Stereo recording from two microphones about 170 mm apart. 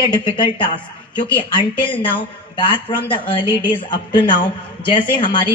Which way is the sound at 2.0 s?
30° left (ahead or behind).